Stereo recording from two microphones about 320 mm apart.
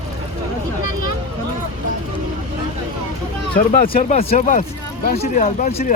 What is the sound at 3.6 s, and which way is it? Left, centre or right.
Speech, left.